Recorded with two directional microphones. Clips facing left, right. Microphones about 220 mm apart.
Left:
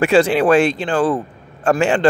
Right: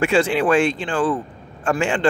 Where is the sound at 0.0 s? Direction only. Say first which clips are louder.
Left 4 dB; 40° left (ahead or behind).